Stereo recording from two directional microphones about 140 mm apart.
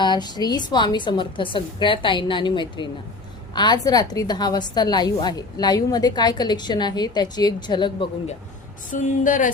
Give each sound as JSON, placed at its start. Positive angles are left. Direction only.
{"t": 0.0, "sound": "a woman's voice", "side_deg": 30}
{"t": 8.9, "sound": "a woman's voice", "side_deg": 70}